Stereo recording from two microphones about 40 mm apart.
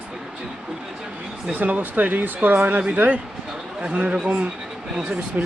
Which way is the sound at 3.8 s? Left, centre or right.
Right.